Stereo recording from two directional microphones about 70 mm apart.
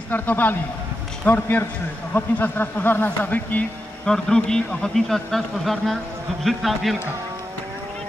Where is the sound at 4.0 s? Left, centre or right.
Centre.